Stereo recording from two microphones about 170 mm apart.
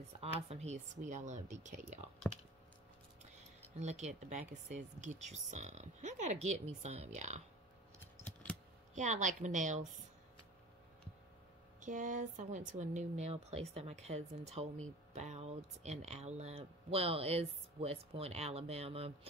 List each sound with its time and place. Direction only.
0.2 s speech: 40° right (ahead or behind)
3.3 s speech: 45° right (ahead or behind)
8.9 s speech: 45° right (ahead or behind)
11.8 s speech: 50° right (ahead or behind)